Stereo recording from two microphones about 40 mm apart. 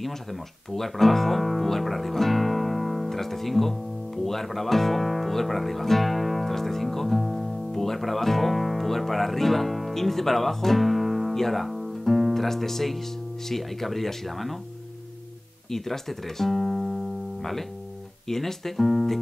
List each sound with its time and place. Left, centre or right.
0.0 s speech: centre
15.7 s music: centre
18.3 s speech: centre